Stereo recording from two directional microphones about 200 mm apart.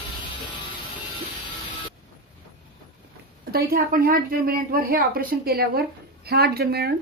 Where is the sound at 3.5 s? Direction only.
45° right (ahead or behind).